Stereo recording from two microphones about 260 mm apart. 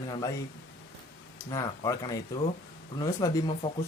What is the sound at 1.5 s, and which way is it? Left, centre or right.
Speech, centre.